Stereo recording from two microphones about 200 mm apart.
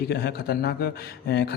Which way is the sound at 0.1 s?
50° left (ahead or behind).